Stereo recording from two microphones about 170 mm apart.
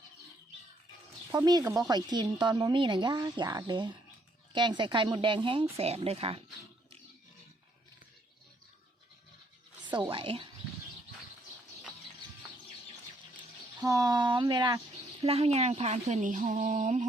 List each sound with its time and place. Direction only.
1.3 s speech: 20° right (ahead or behind)
10.1 s speech: 30° right (ahead or behind)
13.8 s speech: 20° right (ahead or behind)
15.2 s speech: 35° right (ahead or behind)